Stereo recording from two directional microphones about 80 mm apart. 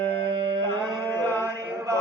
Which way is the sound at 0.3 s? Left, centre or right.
Right.